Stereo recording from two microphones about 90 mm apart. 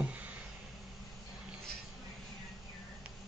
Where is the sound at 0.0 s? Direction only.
15° right (ahead or behind).